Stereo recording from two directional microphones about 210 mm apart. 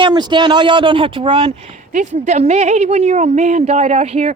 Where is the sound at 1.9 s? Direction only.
35° right (ahead or behind).